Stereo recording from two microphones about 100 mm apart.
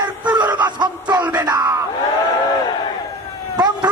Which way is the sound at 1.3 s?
45° right (ahead or behind).